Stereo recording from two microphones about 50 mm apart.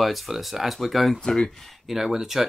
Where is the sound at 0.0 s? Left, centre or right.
Centre.